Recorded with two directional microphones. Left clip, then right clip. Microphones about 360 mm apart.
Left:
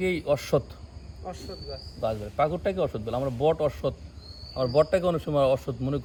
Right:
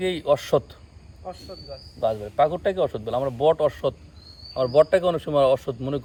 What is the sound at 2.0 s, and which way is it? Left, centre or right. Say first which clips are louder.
Speech: right 5 dB; right.